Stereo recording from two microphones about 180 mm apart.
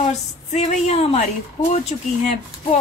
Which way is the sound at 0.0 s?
40° left (ahead or behind).